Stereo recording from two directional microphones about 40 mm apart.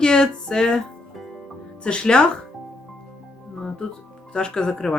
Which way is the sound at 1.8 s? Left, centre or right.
Left.